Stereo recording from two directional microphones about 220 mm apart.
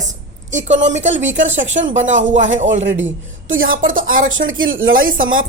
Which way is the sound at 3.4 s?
60° right (ahead or behind).